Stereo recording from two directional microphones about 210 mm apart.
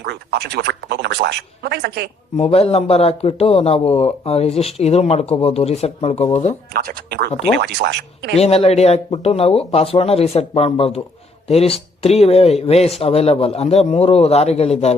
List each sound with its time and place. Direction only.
0.0 s speech: 50° right (ahead or behind)
2.3 s a man's voice: 30° left (ahead or behind)
6.7 s speech: 45° right (ahead or behind)
8.4 s a man's voice: 30° left (ahead or behind)